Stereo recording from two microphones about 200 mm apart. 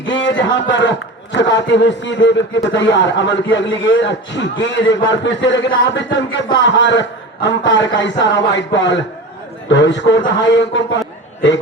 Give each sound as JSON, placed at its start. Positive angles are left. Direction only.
{"t": 0.0, "sound": "a man's voice", "side_deg": 65}